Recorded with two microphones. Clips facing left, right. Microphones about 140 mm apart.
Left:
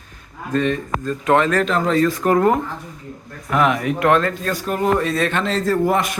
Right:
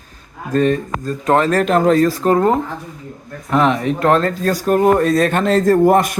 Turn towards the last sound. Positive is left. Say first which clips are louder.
# right 6 dB
turn(degrees=-45)  # may be behind; listen again after turning